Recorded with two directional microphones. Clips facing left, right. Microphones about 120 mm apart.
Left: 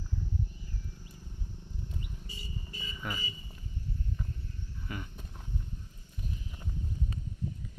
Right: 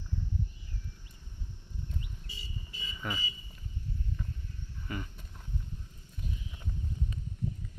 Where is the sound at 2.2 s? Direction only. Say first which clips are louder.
Left 2 dB; 45° left (ahead or behind).